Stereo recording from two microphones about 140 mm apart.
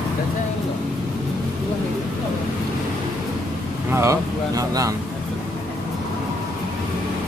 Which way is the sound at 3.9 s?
20° right (ahead or behind).